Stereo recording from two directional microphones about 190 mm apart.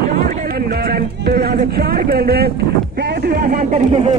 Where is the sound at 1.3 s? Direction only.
50° right (ahead or behind).